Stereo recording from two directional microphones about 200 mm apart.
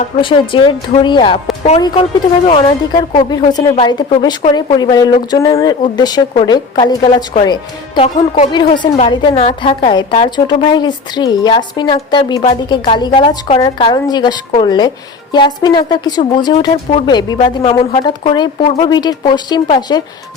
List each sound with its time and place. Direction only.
0.2 s a woman's voice: 25° left (ahead or behind)
2.5 s a woman's voice: 20° left (ahead or behind)